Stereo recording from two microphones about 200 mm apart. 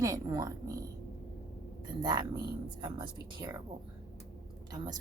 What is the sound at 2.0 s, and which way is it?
Speech, 20° right (ahead or behind).